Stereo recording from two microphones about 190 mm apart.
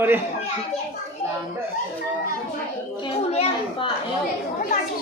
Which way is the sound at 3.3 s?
30° left (ahead or behind).